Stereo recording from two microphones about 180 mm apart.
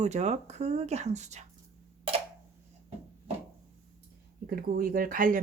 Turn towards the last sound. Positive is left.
turn(degrees=-50)  # may be behind; listen again after turning